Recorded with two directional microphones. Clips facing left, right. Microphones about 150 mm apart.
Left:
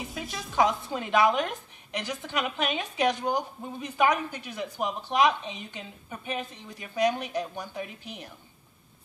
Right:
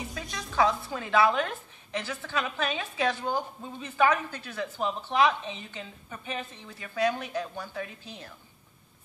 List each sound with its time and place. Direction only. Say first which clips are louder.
0.1 s speech: left 2 dB; 5° left (ahead or behind)
0.6 s a woman's voice: left 1 dB; 15° left (ahead or behind)